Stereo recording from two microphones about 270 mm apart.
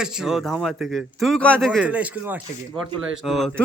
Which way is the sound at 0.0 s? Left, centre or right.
Centre.